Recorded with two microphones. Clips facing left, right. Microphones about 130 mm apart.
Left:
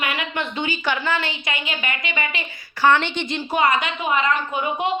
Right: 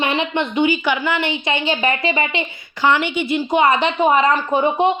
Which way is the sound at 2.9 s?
10° right (ahead or behind).